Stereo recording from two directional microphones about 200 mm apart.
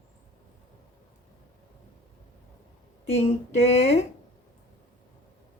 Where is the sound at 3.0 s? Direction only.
30° left (ahead or behind).